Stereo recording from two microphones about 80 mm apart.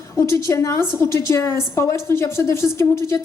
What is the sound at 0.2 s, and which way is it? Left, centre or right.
A woman's voice, left.